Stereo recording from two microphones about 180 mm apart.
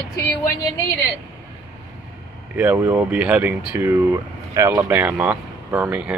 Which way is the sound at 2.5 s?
10° right (ahead or behind).